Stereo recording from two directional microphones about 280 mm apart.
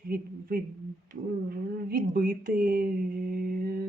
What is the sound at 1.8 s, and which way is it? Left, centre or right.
Speech, right.